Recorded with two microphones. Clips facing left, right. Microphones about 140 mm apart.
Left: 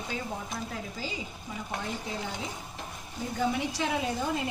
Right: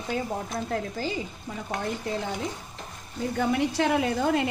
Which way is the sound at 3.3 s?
60° right (ahead or behind).